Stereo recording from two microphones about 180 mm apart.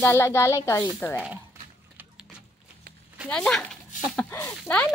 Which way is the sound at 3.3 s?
5° left (ahead or behind).